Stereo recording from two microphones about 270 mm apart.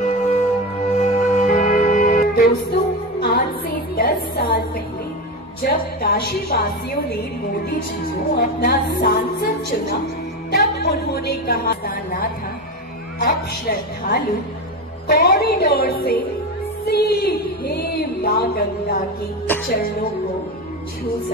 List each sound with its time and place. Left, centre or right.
0.0 s music: left
3.9 s a sound: left
5.6 s music: left
8.4 s music: left
10.5 s a woman's voice: left
13.2 s music: left
19.4 s music: centre
19.7 s music: left